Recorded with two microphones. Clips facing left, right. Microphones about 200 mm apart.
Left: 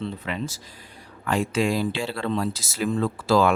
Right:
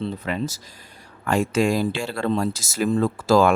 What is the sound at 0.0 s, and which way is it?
Speech, 40° right (ahead or behind).